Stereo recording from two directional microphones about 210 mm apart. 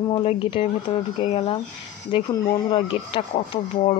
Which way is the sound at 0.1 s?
25° left (ahead or behind).